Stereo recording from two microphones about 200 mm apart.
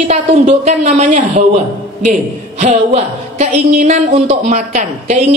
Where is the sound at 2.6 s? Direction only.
35° right (ahead or behind).